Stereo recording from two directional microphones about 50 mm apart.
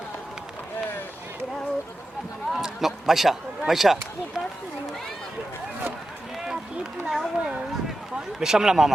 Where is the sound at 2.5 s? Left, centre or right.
Centre.